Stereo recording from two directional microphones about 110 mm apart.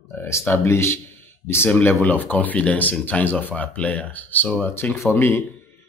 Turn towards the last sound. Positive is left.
turn(degrees=25)  # may be behind; listen again after turning